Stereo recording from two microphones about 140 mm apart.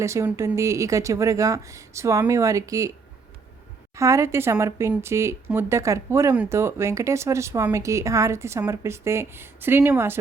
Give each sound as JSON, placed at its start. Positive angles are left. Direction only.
{"t": 0.0, "sound": "a woman's voice", "side_deg": -20}
{"t": 3.9, "sound": "a woman's voice", "side_deg": -20}